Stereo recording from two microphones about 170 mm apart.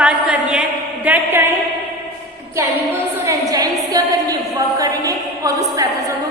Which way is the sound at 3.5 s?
20° right (ahead or behind).